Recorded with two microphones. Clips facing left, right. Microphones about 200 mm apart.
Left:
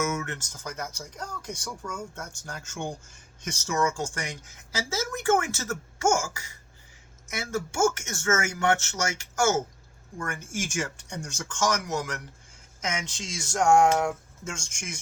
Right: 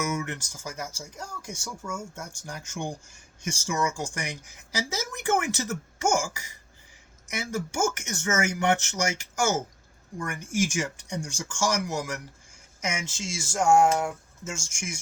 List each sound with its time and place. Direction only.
0.0 s speech: 15° right (ahead or behind)